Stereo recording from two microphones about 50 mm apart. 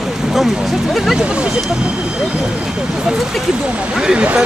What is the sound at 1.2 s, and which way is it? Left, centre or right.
Speech, right.